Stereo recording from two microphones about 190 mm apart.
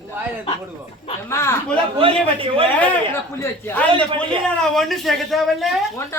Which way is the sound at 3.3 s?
10° left (ahead or behind).